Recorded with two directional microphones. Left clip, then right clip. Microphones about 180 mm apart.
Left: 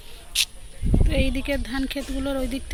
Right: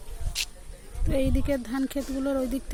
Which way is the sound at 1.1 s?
15° right (ahead or behind).